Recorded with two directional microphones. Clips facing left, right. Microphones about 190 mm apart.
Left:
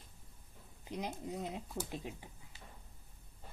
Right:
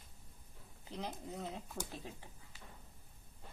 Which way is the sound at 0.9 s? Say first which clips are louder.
Left 3 dB; 15° left (ahead or behind).